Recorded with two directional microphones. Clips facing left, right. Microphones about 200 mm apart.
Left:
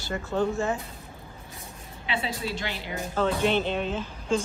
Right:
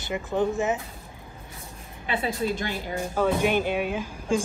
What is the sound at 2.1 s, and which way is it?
Speech, 50° right (ahead or behind).